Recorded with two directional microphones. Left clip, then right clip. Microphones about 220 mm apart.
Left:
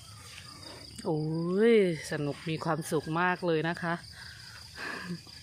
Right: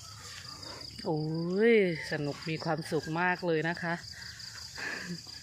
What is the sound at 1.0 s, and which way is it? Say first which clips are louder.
Speech: left 2 dB; 10° left (ahead or behind).